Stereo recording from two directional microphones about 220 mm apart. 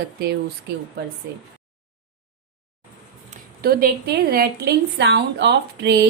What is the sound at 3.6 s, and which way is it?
Speech, 45° right (ahead or behind).